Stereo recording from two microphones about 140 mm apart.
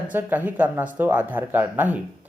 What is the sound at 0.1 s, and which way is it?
Speech, 15° right (ahead or behind).